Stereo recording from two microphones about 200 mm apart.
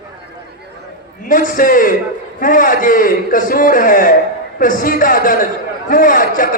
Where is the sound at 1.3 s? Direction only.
40° left (ahead or behind).